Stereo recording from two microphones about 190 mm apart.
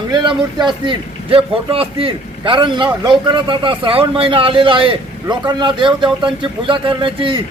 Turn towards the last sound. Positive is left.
turn(degrees=-25)  # may be behind; listen again after turning